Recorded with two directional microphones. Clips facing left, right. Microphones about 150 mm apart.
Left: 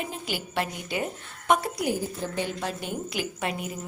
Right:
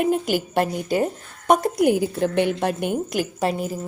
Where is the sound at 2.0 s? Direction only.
70° right (ahead or behind); by 3.7 s 35° right (ahead or behind).